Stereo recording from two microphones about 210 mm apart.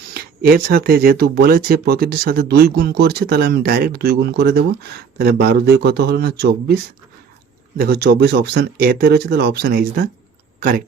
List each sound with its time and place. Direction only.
0.1 s speech: 45° right (ahead or behind)